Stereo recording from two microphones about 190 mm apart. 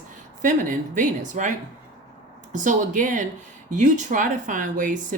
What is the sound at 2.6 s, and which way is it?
Speech, 40° right (ahead or behind).